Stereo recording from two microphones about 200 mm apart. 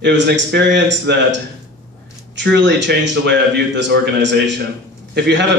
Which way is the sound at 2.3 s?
60° right (ahead or behind).